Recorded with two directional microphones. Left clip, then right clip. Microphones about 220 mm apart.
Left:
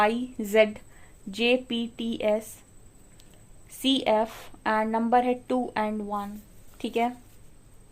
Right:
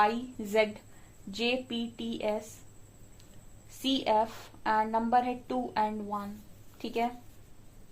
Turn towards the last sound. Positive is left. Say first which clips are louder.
# left 5 dB
turn(degrees=45)  # may be behind; listen again after turning